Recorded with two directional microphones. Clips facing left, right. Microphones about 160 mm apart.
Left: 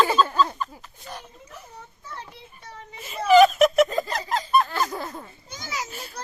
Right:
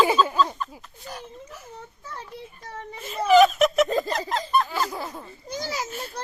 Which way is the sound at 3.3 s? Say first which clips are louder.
Left 1 dB; centre (ahead or behind).